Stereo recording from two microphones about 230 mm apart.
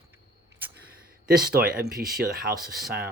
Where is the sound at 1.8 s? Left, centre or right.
Right.